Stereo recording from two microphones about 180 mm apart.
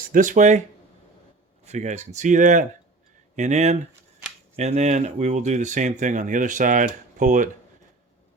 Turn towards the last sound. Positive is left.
turn(degrees=-45)  # may be behind; listen again after turning